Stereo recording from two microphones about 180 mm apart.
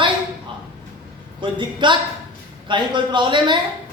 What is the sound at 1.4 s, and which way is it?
Speech, 25° right (ahead or behind).